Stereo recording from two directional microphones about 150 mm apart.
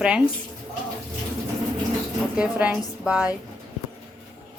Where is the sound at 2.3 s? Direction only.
10° right (ahead or behind).